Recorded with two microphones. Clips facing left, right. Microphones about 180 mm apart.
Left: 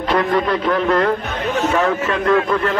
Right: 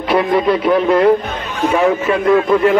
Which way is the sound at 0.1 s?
10° right (ahead or behind).